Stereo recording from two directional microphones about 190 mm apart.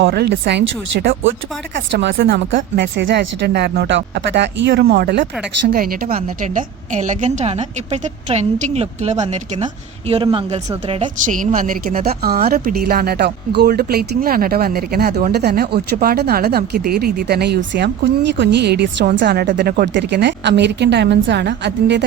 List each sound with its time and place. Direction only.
0.0 s a woman's voice: 60° right (ahead or behind); by 11.1 s 30° right (ahead or behind)
11.3 s speech: 45° right (ahead or behind); by 22.0 s 65° right (ahead or behind)